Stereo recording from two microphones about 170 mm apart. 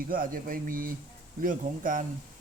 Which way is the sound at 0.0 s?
55° right (ahead or behind).